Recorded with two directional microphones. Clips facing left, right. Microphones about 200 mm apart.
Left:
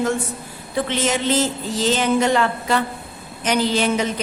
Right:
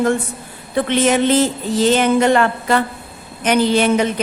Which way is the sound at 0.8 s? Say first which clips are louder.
Right 7 dB; 60° right (ahead or behind).